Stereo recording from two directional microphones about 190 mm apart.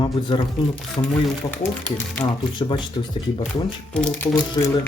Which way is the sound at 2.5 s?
25° left (ahead or behind).